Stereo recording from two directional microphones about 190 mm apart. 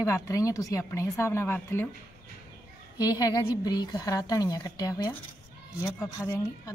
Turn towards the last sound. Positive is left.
turn(degrees=15)  # may be behind; listen again after turning